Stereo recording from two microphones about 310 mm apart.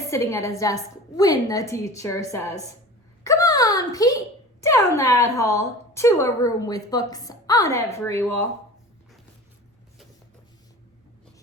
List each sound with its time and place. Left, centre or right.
0.1 s a woman's voice: centre
3.2 s a sound: centre
4.6 s a woman's voice: centre